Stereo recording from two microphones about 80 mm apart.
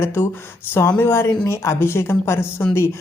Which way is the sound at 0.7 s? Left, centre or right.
Left.